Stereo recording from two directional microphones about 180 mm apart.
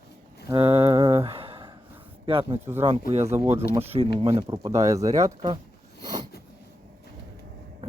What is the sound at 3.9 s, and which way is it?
Speech, 30° right (ahead or behind).